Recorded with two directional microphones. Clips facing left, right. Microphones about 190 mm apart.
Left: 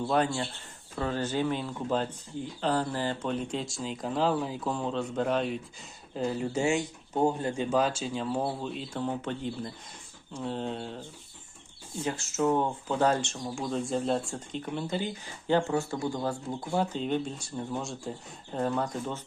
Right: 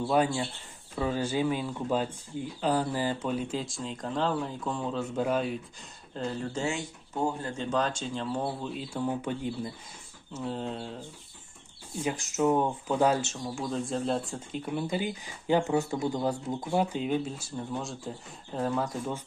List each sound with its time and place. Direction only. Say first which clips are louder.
0.0 s speech: right 1 dB; 10° right (ahead or behind)
6.1 s speech: left 3 dB; 10° left (ahead or behind)
12.0 s speech: right 1 dB; 15° right (ahead or behind)